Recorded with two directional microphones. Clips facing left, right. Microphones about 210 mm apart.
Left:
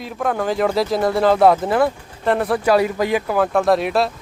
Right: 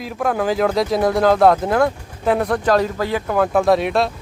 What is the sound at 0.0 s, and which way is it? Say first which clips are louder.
Speech: right 1 dB; centre (ahead or behind).